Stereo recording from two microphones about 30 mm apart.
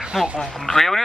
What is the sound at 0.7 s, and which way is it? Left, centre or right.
Speech, centre.